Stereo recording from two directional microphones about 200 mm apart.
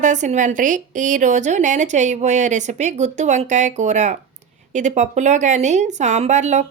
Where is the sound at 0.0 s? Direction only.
40° right (ahead or behind).